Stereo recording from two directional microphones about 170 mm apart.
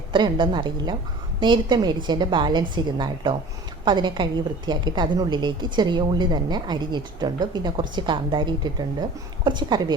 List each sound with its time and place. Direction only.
0.1 s a woman's voice: 30° right (ahead or behind)